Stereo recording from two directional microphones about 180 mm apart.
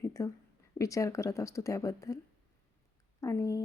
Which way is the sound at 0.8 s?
20° left (ahead or behind).